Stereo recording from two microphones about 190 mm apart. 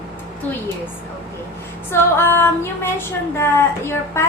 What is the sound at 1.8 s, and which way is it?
Female singing, 10° left (ahead or behind).